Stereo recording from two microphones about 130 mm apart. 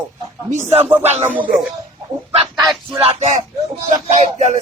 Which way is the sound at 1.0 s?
55° right (ahead or behind).